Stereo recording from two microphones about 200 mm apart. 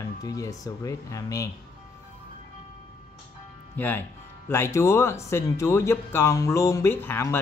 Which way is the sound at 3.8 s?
10° left (ahead or behind).